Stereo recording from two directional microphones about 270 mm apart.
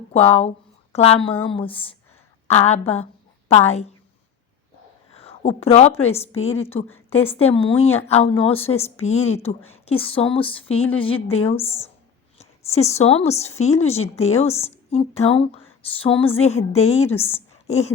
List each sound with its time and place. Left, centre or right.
0.1 s speech: left
5.1 s a sound: left
6.0 s speech: left
17.2 s a woman's voice: centre
17.7 s speech: left